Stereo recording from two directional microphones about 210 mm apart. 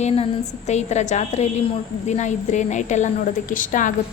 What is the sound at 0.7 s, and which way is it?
A woman's voice, 35° left (ahead or behind).